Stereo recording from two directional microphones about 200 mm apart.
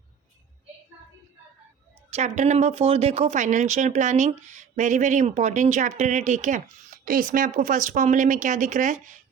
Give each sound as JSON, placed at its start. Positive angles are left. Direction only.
{"t": 2.1, "sound": "speech", "side_deg": -35}